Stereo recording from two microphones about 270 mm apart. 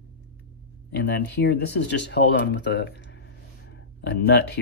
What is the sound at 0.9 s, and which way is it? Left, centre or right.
Speech, left.